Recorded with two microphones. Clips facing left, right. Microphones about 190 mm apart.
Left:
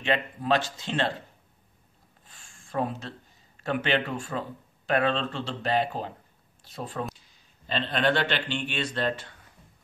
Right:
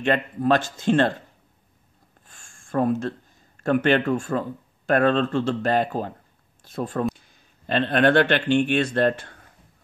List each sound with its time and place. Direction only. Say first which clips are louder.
0.0 s speech: right 6 dB; 50° right (ahead or behind)
2.2 s a sound: right 1 dB; 45° right (ahead or behind)
3.6 s speech: right 7 dB; 50° right (ahead or behind)